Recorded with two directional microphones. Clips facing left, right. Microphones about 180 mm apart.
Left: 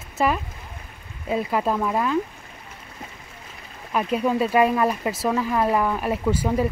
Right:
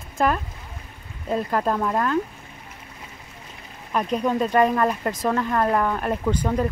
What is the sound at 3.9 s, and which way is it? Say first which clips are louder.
Speech: left 1 dB; 5° left (ahead or behind).